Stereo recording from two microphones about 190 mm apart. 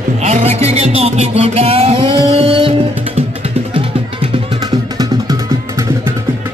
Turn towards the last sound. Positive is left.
turn(degrees=-20)  # may be behind; listen again after turning